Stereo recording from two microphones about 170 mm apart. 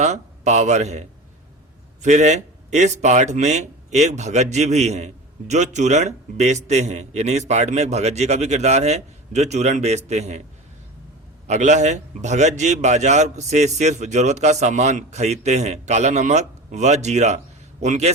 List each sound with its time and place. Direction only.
0.0 s a man's voice: 40° right (ahead or behind)
11.4 s a man's voice: 40° right (ahead or behind)